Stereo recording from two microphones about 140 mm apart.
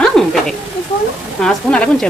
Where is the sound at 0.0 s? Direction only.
5° left (ahead or behind).